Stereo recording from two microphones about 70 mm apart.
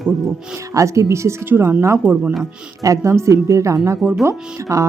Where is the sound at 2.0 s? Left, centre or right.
Centre.